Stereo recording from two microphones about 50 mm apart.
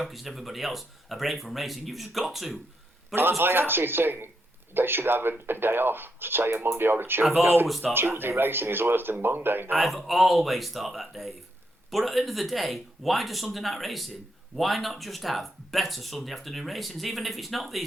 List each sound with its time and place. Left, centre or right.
0.0 s speech: centre
3.3 s speech: right
7.7 s speech: centre
7.9 s speech: right
9.7 s speech: centre